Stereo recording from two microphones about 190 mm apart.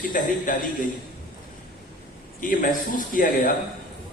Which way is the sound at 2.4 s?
45° left (ahead or behind).